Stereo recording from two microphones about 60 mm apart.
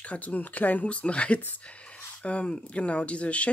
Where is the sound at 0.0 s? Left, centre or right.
Left.